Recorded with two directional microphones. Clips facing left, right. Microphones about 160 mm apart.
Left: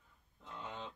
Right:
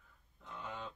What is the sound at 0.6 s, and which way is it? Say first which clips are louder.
Speech: right 1 dB; 20° left (ahead or behind).